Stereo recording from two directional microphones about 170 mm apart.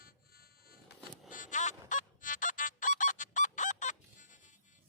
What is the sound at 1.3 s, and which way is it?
Music, 50° left (ahead or behind).